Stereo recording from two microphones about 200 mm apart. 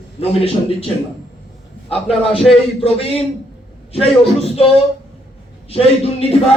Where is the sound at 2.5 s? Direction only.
30° left (ahead or behind).